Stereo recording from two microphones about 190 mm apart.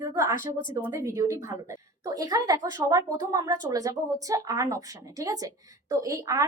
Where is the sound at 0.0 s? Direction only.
15° right (ahead or behind).